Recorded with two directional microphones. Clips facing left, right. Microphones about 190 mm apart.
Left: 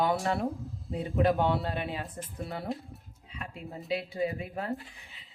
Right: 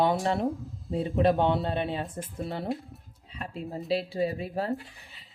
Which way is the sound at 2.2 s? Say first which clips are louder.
Right 4 dB; 30° right (ahead or behind).